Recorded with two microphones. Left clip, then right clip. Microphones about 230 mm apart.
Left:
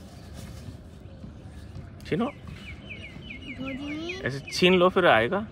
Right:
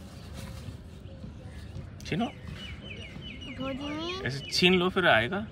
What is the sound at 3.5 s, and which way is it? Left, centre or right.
Chicken, centre.